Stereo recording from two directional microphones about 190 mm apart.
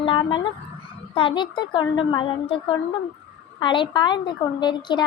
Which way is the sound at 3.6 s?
25° left (ahead or behind).